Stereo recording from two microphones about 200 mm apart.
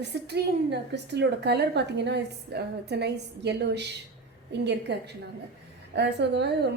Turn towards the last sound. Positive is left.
turn(degrees=-60)  # may be behind; listen again after turning